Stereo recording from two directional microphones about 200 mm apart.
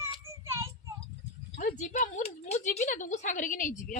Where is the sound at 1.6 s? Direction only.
40° left (ahead or behind).